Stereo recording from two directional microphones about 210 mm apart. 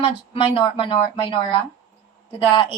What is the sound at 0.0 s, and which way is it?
Speech, 25° left (ahead or behind).